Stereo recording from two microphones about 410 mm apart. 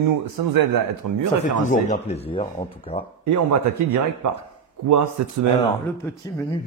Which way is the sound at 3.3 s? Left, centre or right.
Right.